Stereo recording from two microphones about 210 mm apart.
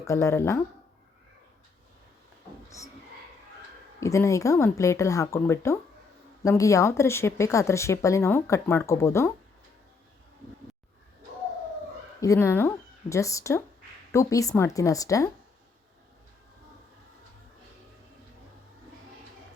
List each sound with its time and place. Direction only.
0.0 s speech: 15° left (ahead or behind)
2.6 s a sound: 15° left (ahead or behind)
4.0 s speech: 15° left (ahead or behind)
12.2 s speech: 15° left (ahead or behind)